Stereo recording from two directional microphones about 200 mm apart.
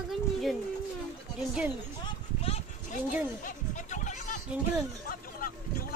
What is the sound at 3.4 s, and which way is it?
Music, 40° left (ahead or behind).